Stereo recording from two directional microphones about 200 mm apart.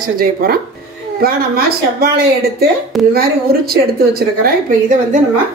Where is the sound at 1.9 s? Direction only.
50° right (ahead or behind).